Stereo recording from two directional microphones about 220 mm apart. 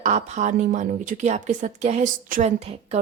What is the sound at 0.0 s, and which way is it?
A woman's voice, 35° right (ahead or behind).